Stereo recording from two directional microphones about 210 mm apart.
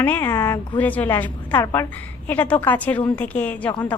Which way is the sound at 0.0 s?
10° left (ahead or behind).